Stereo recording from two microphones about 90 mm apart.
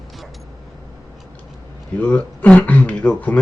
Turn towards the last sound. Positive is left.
turn(degrees=15)  # may be behind; listen again after turning